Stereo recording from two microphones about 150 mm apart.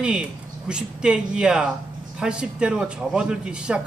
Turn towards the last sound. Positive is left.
turn(degrees=-5)  # may be behind; listen again after turning